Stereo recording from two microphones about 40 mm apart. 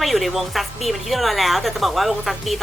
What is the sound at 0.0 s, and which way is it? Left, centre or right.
A woman's voice, centre.